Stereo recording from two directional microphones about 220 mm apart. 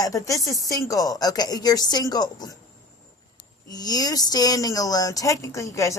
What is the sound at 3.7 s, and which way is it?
A woman's voice, 15° left (ahead or behind).